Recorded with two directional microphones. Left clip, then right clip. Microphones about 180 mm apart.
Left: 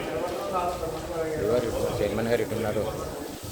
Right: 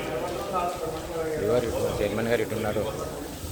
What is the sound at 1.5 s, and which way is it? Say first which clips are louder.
Speech: right 1 dB; centre (ahead or behind).